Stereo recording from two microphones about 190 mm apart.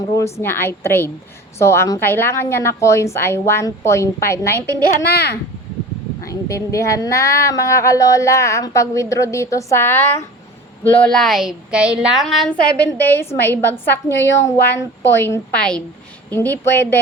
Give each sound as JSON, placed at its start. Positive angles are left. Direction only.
{"t": 0.3, "sound": "speech", "side_deg": 10}
{"t": 4.6, "sound": "a child's voice", "side_deg": 60}
{"t": 6.2, "sound": "a woman's voice", "side_deg": 15}
{"t": 13.0, "sound": "speech", "side_deg": 10}
{"t": 14.1, "sound": "a woman's voice", "side_deg": 70}
{"t": 14.3, "sound": "speech", "side_deg": 15}